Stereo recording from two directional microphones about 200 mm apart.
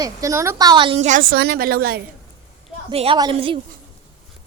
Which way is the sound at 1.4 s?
45° right (ahead or behind).